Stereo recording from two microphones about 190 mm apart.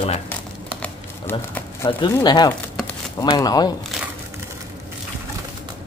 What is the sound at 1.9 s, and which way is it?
Speech, 25° left (ahead or behind).